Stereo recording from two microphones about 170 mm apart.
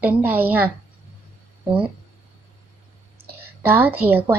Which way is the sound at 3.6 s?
10° right (ahead or behind).